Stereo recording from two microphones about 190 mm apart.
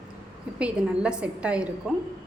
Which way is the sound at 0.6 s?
5° right (ahead or behind).